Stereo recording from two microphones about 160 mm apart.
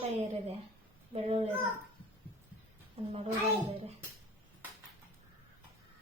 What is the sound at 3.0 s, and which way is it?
Speech, 35° right (ahead or behind).